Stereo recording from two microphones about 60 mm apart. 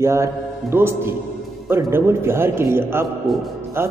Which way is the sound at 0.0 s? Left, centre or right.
Right.